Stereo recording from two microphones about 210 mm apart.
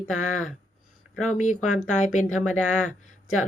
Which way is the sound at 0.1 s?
35° left (ahead or behind).